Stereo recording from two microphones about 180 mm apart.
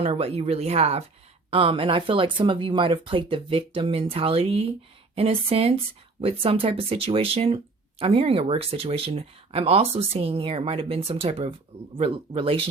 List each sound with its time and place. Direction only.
0.0 s speech: 35° right (ahead or behind)